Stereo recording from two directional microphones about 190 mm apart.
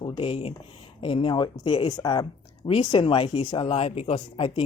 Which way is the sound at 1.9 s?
20° left (ahead or behind).